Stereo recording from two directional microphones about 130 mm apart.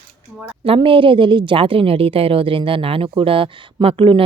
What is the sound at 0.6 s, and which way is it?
A woman's voice, 45° right (ahead or behind).